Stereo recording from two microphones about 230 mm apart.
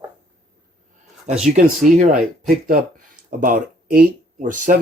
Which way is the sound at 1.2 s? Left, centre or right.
Right.